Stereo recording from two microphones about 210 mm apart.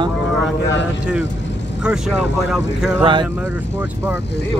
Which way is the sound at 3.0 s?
20° right (ahead or behind).